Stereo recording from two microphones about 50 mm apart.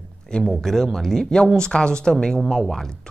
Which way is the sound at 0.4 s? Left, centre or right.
Centre.